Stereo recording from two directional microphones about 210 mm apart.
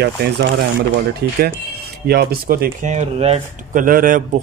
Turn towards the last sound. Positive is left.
turn(degrees=-40)  # may be behind; listen again after turning